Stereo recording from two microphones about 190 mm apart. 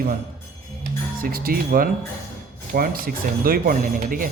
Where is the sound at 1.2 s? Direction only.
50° right (ahead or behind).